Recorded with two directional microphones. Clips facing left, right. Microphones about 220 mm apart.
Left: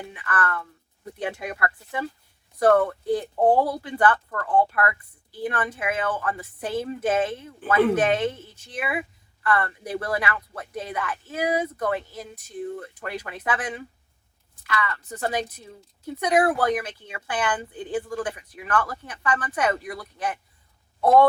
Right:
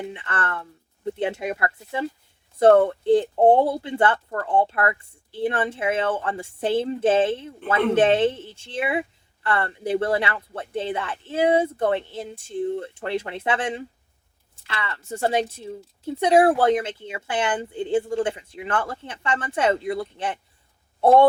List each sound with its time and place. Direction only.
0.0 s a woman's voice: 25° right (ahead or behind)